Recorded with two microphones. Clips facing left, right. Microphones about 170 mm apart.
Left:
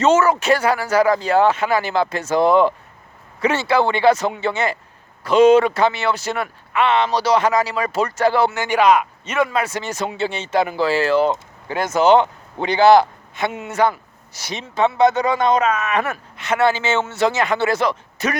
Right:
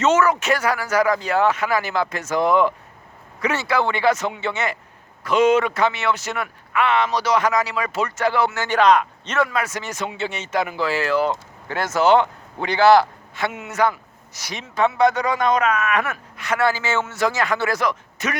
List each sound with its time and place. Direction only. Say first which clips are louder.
0.0 s a man's voice: left 2 dB; 30° left (ahead or behind)
8.5 s speech: left 1 dB; 15° left (ahead or behind)
9.5 s speech: left 3 dB; 30° left (ahead or behind)